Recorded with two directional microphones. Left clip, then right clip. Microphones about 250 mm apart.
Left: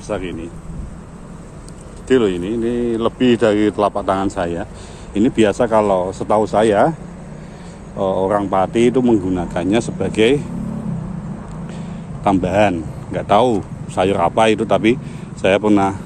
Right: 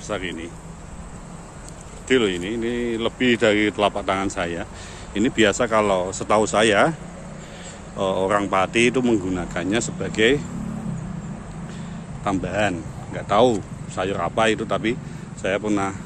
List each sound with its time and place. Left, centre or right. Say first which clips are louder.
0.1 s a man's voice: left 4 dB; centre
2.0 s a man's voice: left 5 dB; centre
8.0 s a man's voice: left 4 dB; centre
11.7 s a man's voice: left 4 dB; centre